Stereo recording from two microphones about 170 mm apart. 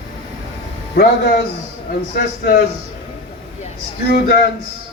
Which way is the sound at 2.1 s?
60° left (ahead or behind).